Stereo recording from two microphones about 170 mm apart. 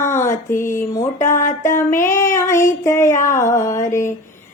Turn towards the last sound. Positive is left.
turn(degrees=15)  # may be behind; listen again after turning